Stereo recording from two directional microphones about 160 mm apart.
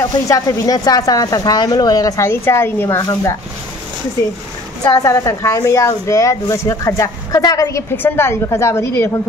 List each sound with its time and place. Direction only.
0.0 s a woman's voice: 20° left (ahead or behind)
4.8 s a woman's voice: 20° left (ahead or behind)